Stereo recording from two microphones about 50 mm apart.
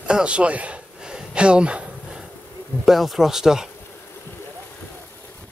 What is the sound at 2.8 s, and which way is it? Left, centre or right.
Speech, centre.